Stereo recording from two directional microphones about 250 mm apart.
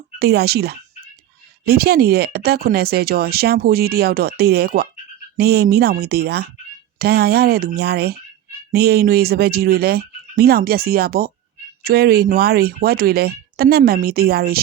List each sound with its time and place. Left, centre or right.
0.2 s speech: right